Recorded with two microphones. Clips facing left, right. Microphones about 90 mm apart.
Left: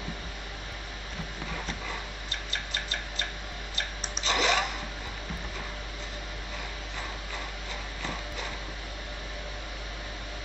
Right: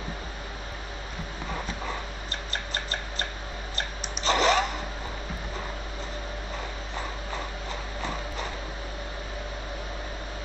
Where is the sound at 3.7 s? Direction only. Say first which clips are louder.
Right 1 dB; 40° right (ahead or behind).